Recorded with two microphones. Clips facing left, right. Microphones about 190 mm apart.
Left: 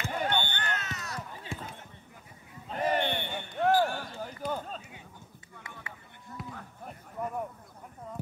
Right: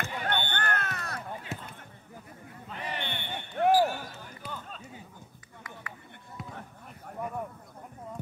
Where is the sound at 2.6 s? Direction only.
45° left (ahead or behind).